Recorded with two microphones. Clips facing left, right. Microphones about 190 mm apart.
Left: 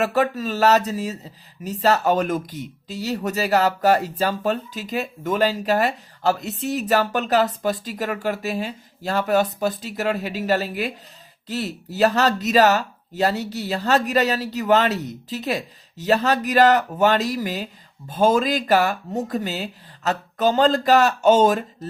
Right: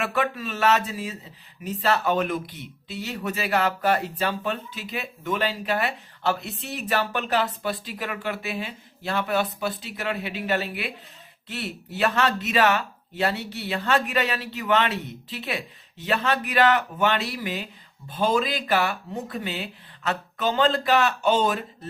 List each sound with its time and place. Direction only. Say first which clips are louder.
0.0 s speech: left 6 dB; 40° left (ahead or behind)